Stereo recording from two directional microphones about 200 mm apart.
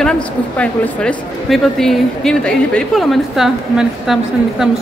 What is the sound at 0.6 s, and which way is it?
A woman's voice, 5° left (ahead or behind).